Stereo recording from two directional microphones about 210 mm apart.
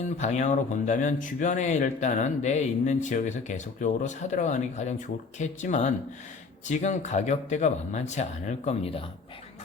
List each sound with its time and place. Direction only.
0.0 s speech: 35° left (ahead or behind)